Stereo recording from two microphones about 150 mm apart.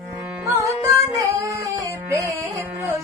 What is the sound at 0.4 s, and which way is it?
Music, 20° right (ahead or behind).